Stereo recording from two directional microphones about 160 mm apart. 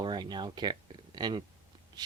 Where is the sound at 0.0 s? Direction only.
30° right (ahead or behind).